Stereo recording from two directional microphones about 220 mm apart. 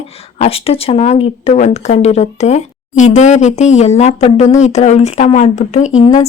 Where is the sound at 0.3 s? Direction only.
25° left (ahead or behind).